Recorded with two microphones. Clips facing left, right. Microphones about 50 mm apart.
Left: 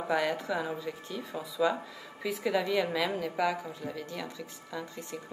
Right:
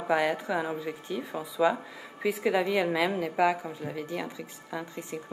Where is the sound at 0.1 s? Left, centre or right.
Centre.